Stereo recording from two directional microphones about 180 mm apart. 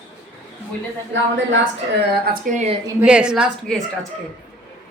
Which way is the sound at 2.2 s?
45° right (ahead or behind).